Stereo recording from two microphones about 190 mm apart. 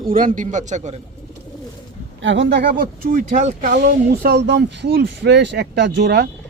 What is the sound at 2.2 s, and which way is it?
Speech, 75° right (ahead or behind).